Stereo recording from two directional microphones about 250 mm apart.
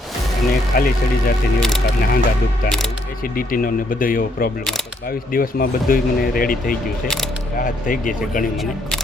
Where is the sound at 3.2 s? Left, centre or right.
Left.